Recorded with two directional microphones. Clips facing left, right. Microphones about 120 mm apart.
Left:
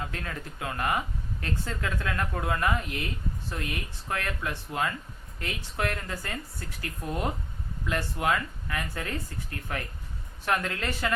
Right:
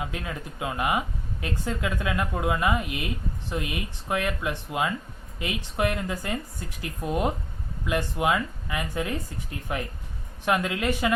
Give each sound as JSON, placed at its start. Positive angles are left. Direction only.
{"t": 0.0, "sound": "speech", "side_deg": -10}